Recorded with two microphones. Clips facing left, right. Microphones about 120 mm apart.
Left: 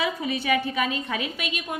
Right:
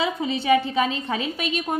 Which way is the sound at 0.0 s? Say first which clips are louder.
Right 2 dB; 25° right (ahead or behind).